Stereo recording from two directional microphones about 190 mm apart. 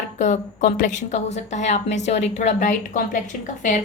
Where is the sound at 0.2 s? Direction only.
40° left (ahead or behind).